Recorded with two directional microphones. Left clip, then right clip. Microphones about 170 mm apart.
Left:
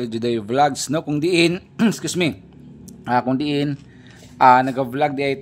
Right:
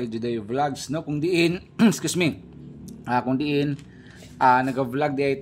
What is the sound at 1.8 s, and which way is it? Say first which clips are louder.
Speech: left 1 dB; centre (ahead or behind).